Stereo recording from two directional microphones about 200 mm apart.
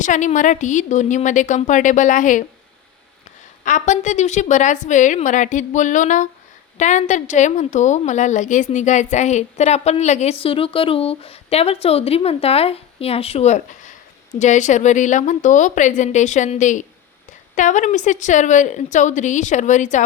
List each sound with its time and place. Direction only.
0.0 s a woman's voice: 40° left (ahead or behind)
3.6 s a woman's voice: 40° left (ahead or behind)